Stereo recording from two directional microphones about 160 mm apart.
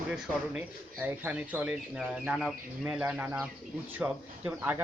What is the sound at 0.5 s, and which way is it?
Speech, 10° right (ahead or behind).